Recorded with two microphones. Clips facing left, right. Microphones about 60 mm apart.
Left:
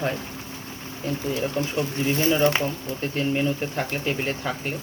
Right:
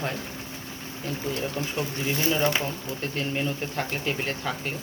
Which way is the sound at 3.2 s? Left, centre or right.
Centre.